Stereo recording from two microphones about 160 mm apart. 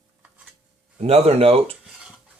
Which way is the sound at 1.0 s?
40° right (ahead or behind).